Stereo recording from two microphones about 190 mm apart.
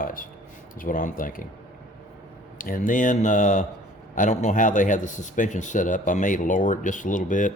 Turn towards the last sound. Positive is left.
turn(degrees=45)  # may be behind; listen again after turning